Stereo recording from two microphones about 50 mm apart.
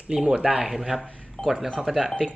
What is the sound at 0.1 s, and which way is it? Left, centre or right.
Speech, centre.